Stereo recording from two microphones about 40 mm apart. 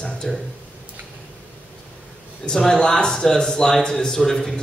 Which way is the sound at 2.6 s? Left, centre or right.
Centre.